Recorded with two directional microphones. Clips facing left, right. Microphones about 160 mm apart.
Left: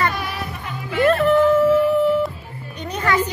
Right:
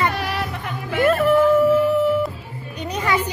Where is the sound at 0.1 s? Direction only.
70° right (ahead or behind).